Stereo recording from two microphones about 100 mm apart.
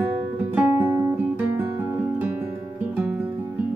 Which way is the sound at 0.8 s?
30° right (ahead or behind).